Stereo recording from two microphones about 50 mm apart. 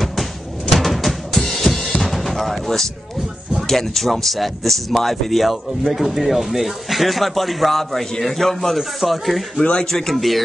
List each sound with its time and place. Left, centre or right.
0.0 s drum kit: centre
3.6 s speech: centre
9.6 s speech: left
9.8 s speech: centre